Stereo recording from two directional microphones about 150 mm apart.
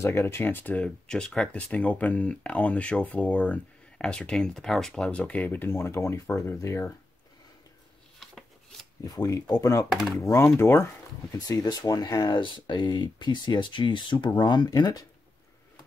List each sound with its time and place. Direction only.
0.0 s speech: 15° left (ahead or behind)
9.0 s speech: 25° left (ahead or behind)